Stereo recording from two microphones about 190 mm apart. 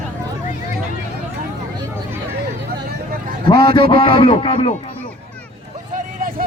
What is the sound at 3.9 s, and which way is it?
Speech, 25° left (ahead or behind).